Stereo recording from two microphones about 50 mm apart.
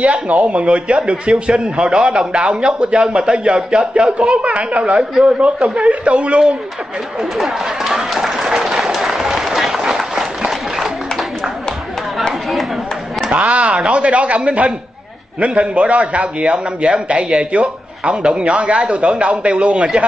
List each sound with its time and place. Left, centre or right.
0.0 s a man's voice: right
4.4 s a man's voice: right
7.3 s applause: centre
13.3 s a man's voice: right